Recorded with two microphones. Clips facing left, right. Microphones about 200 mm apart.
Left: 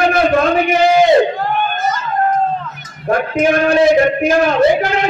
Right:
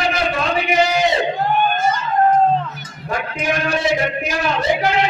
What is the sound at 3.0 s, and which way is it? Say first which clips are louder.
A man's voice: left 8 dB; 50° left (ahead or behind).